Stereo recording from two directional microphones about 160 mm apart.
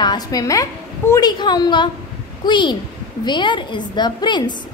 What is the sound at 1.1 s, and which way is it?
A woman's voice, 25° left (ahead or behind).